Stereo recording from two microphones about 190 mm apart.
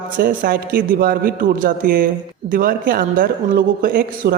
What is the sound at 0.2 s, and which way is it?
Speech, 50° right (ahead or behind).